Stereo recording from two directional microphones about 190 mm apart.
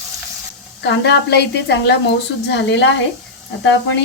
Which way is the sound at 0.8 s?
65° left (ahead or behind).